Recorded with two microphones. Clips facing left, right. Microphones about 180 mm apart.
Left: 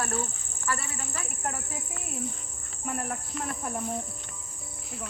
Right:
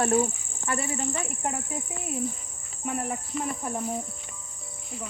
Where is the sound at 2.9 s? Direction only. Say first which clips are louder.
Right 3 dB; centre (ahead or behind).